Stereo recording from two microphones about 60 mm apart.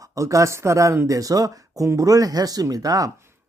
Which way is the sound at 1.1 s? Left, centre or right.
Right.